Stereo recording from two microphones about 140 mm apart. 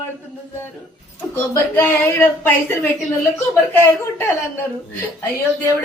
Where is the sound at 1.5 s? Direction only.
15° left (ahead or behind).